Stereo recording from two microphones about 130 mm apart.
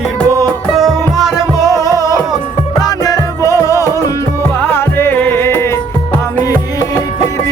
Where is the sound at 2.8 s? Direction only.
30° left (ahead or behind).